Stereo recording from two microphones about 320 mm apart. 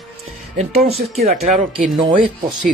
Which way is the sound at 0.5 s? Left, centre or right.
Centre.